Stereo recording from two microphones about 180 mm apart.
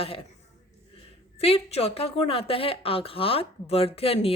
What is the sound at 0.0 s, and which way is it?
Speech, 30° left (ahead or behind).